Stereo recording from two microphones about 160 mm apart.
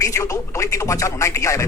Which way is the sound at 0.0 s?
20° left (ahead or behind).